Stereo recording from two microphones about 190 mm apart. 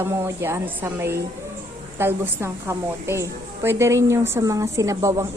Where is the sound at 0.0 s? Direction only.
15° right (ahead or behind).